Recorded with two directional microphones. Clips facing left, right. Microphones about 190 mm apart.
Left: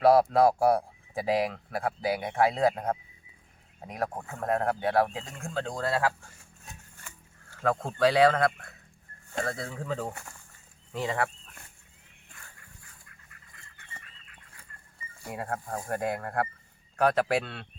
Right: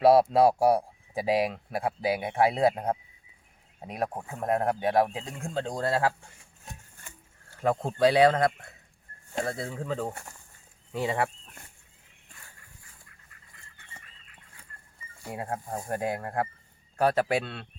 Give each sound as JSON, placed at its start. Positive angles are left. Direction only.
{"t": 0.0, "sound": "speech", "side_deg": -25}
{"t": 0.3, "sound": "speech", "side_deg": -10}
{"t": 2.6, "sound": "speech", "side_deg": -15}
{"t": 7.5, "sound": "speech", "side_deg": -15}
{"t": 9.6, "sound": "a man's voice", "side_deg": -5}
{"t": 15.2, "sound": "speech", "side_deg": -20}
{"t": 17.0, "sound": "a man's voice", "side_deg": -5}